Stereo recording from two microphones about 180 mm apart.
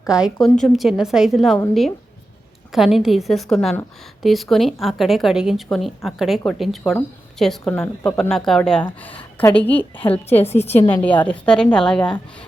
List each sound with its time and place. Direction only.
0.1 s a woman's voice: centre (ahead or behind)
2.7 s a woman's voice: centre (ahead or behind)
10.4 s a woman's voice: 35° left (ahead or behind)
10.7 s a woman's voice: 10° left (ahead or behind)